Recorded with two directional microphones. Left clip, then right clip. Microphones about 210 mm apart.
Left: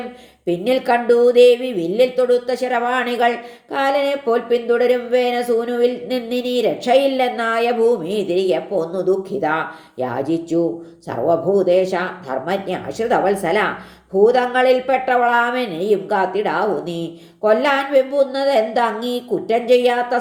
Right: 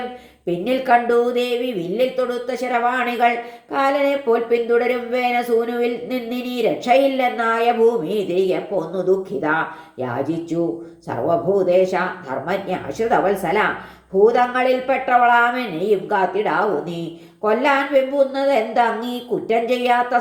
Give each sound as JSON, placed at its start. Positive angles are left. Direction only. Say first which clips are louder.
{"t": 0.6, "sound": "a woman's voice", "louder": "right 1 dB", "side_deg": 35}